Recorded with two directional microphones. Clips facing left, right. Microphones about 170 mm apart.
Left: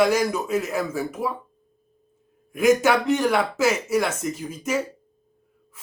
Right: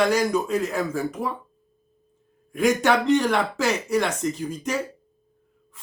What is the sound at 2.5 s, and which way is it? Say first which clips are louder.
Speech: left 2 dB; 5° left (ahead or behind).